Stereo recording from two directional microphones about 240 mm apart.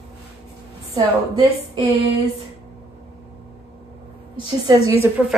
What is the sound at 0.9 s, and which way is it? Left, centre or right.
Speech, centre.